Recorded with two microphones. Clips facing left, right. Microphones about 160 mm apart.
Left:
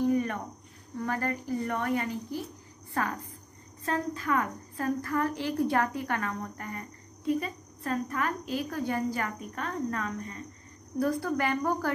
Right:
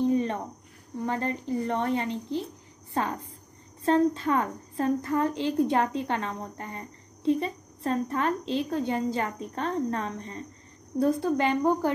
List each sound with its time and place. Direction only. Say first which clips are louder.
0.0 s cricket: right 2 dB; 25° right (ahead or behind)
0.9 s a woman's voice: right 2 dB; 20° right (ahead or behind)